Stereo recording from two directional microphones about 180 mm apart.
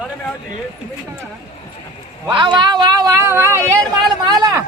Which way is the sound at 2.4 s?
25° right (ahead or behind).